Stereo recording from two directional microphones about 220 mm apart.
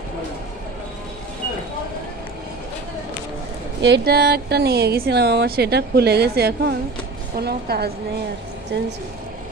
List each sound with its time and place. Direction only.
3.8 s speech: 50° right (ahead or behind)